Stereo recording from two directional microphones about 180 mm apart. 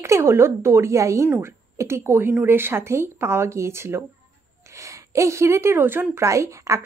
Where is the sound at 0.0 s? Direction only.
15° right (ahead or behind).